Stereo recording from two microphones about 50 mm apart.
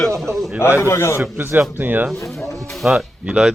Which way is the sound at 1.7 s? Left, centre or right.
Right.